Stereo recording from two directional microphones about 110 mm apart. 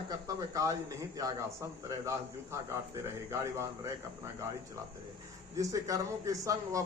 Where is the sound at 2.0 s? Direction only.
25° right (ahead or behind).